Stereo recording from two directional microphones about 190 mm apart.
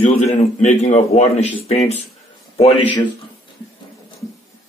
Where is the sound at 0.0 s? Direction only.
35° left (ahead or behind).